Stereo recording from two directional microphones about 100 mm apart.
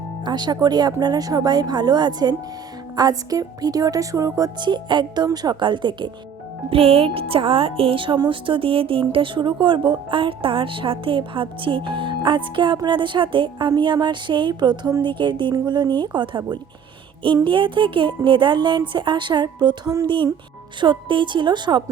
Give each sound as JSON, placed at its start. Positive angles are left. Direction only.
{"t": 0.3, "sound": "speech", "side_deg": -45}
{"t": 4.6, "sound": "speech", "side_deg": -50}
{"t": 6.7, "sound": "speech", "side_deg": -75}
{"t": 20.1, "sound": "speech", "side_deg": -55}